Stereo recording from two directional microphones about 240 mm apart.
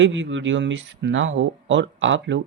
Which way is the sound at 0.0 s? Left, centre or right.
Right.